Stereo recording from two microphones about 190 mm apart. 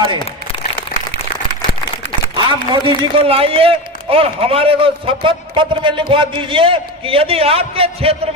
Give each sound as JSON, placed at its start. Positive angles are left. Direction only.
{"t": 2.3, "sound": "a man's voice", "side_deg": -25}